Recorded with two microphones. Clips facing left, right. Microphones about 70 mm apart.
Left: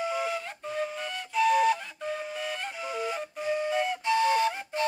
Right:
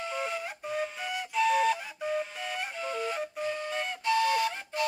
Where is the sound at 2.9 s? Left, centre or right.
Centre.